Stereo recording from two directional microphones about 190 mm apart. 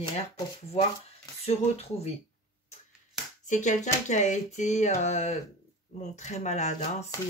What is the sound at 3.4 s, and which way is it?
Speech, 40° left (ahead or behind).